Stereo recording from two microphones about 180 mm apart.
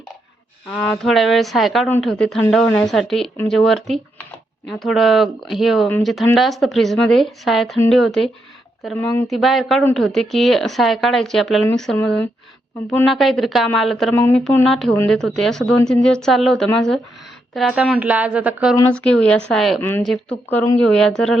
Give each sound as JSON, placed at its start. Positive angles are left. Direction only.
{"t": 0.7, "sound": "speech", "side_deg": 5}
{"t": 11.9, "sound": "speech", "side_deg": 10}
{"t": 13.1, "sound": "speech", "side_deg": 0}
{"t": 18.9, "sound": "speech", "side_deg": 5}